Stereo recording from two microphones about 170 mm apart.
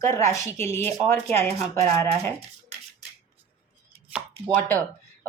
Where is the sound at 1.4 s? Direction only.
40° right (ahead or behind).